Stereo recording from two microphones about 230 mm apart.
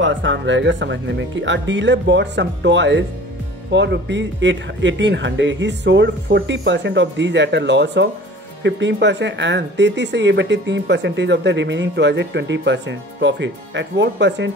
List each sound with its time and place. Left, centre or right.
0.0 s speech: right